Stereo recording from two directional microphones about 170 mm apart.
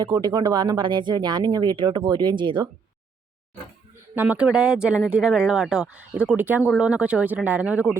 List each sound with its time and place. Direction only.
0.0 s speech: 25° right (ahead or behind)
4.1 s speech: 10° right (ahead or behind)